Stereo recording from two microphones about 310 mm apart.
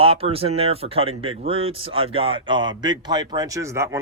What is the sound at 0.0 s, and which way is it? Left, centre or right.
A man's voice, centre.